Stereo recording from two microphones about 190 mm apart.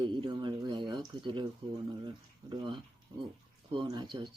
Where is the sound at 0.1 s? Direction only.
25° right (ahead or behind).